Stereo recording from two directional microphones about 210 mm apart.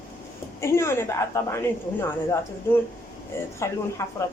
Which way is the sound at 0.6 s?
10° left (ahead or behind).